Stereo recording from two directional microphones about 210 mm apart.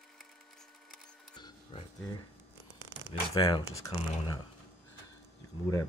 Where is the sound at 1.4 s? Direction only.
25° left (ahead or behind).